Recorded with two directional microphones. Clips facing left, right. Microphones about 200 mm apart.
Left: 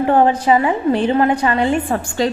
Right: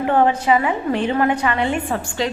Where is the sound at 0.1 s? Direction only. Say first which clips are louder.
Left 2 dB; 35° left (ahead or behind).